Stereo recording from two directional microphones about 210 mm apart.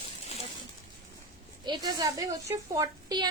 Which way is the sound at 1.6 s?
20° right (ahead or behind).